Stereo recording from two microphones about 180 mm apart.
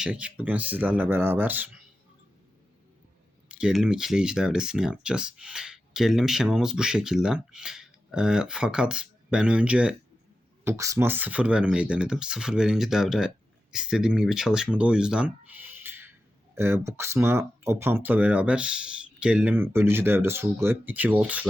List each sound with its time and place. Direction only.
0.0 s speech: 5° right (ahead or behind)
3.5 s speech: 5° right (ahead or behind)